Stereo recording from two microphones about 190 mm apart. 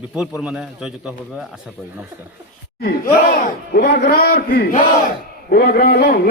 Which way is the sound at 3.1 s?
50° left (ahead or behind).